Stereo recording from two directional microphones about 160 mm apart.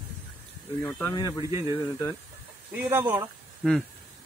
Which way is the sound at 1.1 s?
25° left (ahead or behind).